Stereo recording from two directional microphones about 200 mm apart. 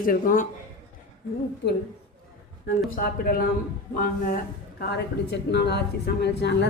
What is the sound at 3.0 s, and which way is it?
Speech, 50° left (ahead or behind).